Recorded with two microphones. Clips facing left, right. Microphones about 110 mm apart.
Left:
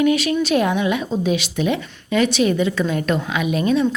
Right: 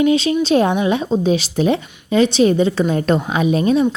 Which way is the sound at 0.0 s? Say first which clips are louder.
Right 2 dB; 25° right (ahead or behind).